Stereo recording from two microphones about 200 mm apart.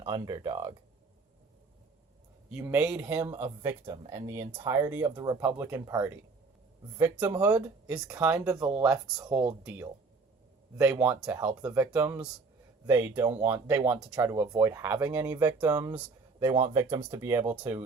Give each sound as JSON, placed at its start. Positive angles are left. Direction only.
{"t": 0.0, "sound": "speech", "side_deg": -20}
{"t": 2.5, "sound": "speech", "side_deg": -10}
{"t": 7.3, "sound": "speech", "side_deg": -10}